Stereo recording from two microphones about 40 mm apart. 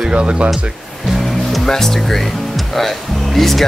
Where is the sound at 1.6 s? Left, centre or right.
Centre.